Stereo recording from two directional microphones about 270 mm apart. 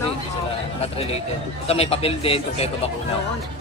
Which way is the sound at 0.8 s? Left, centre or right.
Left.